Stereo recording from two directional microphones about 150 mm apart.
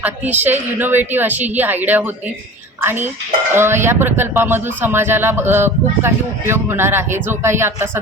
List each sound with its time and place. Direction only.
0.0 s speech: 10° right (ahead or behind)